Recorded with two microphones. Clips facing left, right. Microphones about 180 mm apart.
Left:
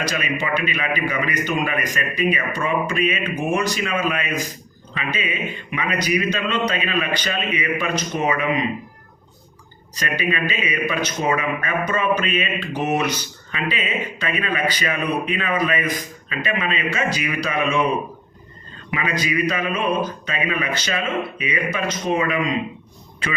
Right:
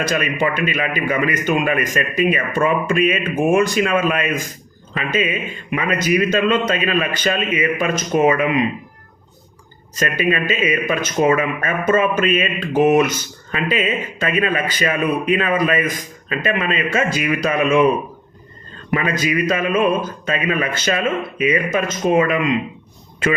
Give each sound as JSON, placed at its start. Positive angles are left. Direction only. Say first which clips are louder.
{"t": 0.0, "sound": "a man's voice", "louder": "right 5 dB", "side_deg": -50}
{"t": 9.9, "sound": "a man's voice", "louder": "right 5 dB", "side_deg": -45}
{"t": 18.9, "sound": "a man's voice", "louder": "right 3 dB", "side_deg": -45}